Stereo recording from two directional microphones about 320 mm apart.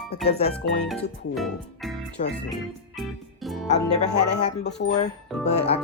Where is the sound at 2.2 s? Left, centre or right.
Left.